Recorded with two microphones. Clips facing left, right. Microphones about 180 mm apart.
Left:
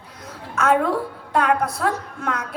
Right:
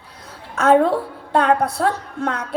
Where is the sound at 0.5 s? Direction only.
30° right (ahead or behind).